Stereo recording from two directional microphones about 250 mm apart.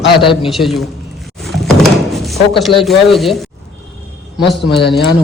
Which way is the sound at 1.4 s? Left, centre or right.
Centre.